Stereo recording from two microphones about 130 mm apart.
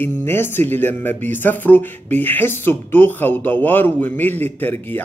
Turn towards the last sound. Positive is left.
turn(degrees=15)  # may be behind; listen again after turning